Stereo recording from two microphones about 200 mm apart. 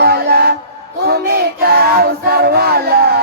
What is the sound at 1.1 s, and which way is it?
Child singing, 50° right (ahead or behind).